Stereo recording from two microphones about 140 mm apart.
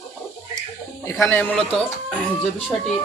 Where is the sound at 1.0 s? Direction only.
20° left (ahead or behind).